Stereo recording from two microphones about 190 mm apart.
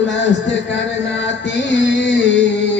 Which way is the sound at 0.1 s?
70° left (ahead or behind).